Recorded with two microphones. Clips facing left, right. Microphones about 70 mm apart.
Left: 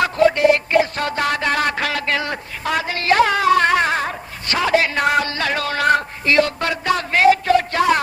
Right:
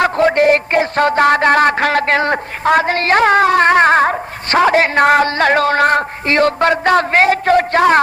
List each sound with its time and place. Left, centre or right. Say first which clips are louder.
0.0 s a man's voice: right 3 dB; right